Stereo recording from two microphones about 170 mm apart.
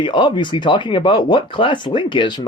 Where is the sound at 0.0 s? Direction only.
30° left (ahead or behind).